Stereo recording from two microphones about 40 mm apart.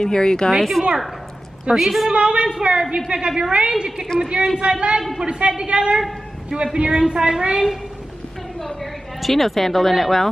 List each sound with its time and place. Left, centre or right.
0.0 s speech: centre
0.5 s speech: centre
2.0 s a woman's voice: right
9.2 s speech: centre